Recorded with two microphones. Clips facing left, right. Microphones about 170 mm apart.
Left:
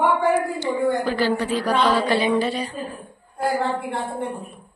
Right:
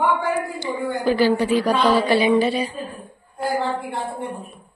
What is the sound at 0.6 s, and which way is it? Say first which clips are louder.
Speech: left 4 dB; 10° right (ahead or behind).